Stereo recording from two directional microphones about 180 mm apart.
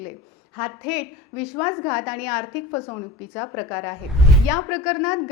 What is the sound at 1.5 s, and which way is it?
Speech, 15° left (ahead or behind).